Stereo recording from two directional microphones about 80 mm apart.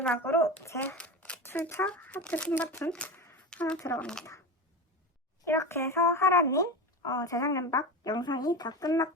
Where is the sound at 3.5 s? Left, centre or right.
Centre.